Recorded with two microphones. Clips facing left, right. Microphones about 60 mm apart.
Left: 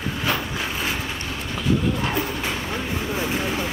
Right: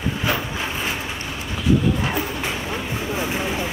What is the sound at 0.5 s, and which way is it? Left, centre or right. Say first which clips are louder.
Vehicle: right 1 dB; right.